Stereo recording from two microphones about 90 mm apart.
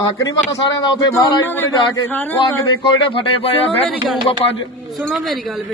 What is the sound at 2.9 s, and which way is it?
Speech, 80° left.